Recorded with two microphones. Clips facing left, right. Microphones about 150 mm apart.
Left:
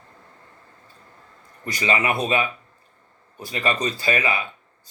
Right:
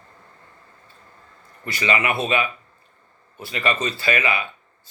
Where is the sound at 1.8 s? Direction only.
35° left (ahead or behind).